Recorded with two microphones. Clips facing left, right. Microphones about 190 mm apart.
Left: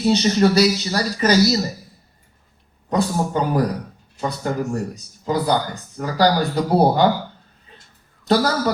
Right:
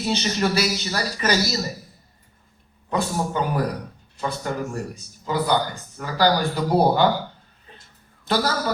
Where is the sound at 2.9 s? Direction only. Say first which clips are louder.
Left 4 dB; 35° left (ahead or behind).